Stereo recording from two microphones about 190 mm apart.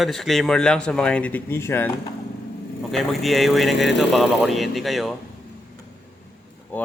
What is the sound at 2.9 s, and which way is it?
Speech, centre (ahead or behind).